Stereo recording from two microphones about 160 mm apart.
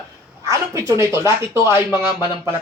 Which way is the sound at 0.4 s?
20° right (ahead or behind).